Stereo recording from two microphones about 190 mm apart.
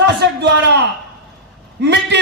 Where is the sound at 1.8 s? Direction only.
65° right (ahead or behind).